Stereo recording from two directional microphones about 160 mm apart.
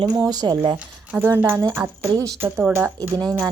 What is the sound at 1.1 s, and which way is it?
Speech, 15° right (ahead or behind).